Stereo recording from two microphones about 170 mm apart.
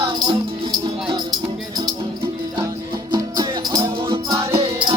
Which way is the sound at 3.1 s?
25° right (ahead or behind).